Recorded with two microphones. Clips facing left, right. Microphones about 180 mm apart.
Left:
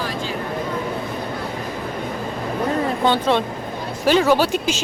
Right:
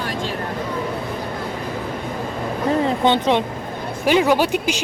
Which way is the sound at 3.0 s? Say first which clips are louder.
Right 1 dB; 20° right (ahead or behind).